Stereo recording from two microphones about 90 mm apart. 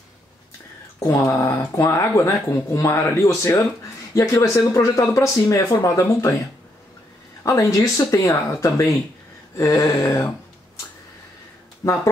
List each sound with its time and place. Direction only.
1.0 s speech: 35° left (ahead or behind)
7.4 s speech: 40° left (ahead or behind)
11.8 s speech: 35° left (ahead or behind)